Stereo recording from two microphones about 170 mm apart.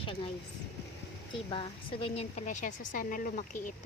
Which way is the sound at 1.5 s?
30° left (ahead or behind).